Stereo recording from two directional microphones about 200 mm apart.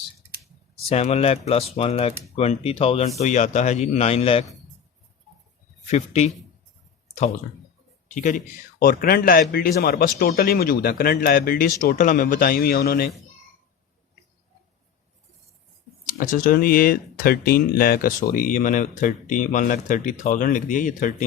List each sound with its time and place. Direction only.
0.9 s speech: 30° left (ahead or behind)
5.9 s speech: 35° left (ahead or behind)
8.1 s a man's voice: 40° left (ahead or behind)
16.0 s speech: 40° left (ahead or behind)